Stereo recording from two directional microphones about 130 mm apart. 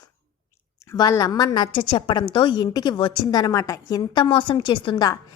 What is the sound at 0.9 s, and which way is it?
A woman's voice, 25° left (ahead or behind).